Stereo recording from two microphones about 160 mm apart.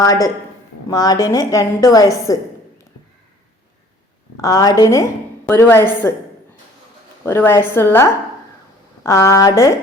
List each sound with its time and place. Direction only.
0.0 s a woman's voice: 20° left (ahead or behind)
4.4 s a woman's voice: 20° left (ahead or behind)
7.3 s a woman's voice: 15° left (ahead or behind)
9.0 s a woman's voice: 15° left (ahead or behind)